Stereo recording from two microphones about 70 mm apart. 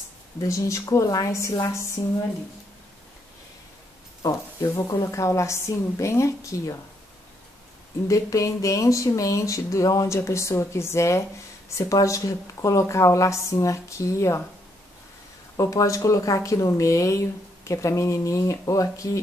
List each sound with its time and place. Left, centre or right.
0.4 s speech: left
0.8 s a woman's voice: left
4.2 s speech: left
8.1 s speech: left
15.5 s speech: left